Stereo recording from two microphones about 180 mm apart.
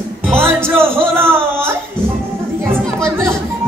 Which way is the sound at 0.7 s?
15° right (ahead or behind).